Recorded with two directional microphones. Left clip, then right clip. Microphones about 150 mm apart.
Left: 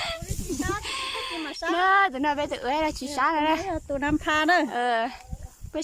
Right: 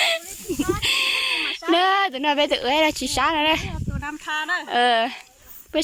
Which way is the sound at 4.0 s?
75° left (ahead or behind).